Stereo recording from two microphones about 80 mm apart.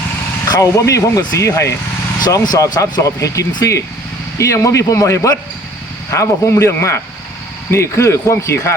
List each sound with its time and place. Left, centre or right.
0.4 s speech: left
2.1 s speech: left
3.0 s speech: left